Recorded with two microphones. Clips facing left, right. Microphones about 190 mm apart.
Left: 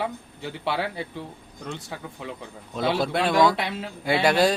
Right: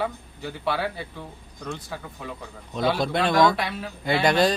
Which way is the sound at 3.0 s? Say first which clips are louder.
Even; 5° left (ahead or behind).